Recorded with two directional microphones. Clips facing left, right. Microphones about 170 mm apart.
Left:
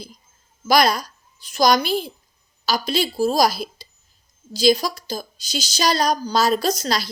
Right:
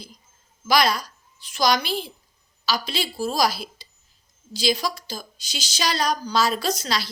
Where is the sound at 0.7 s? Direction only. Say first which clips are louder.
Left 3 dB; 45° left (ahead or behind).